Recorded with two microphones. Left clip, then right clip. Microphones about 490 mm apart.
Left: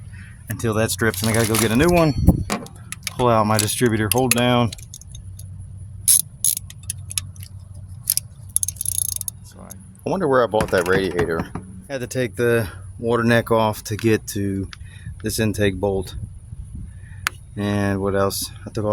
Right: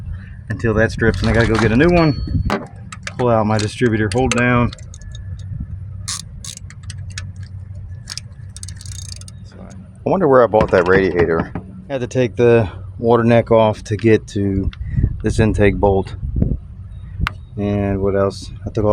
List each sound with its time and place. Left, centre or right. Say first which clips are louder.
0.4 s speech: right 5 dB; left
3.2 s speech: right 1 dB; left
9.6 s speech: right 6 dB; left
17.2 s speech: right 2 dB; left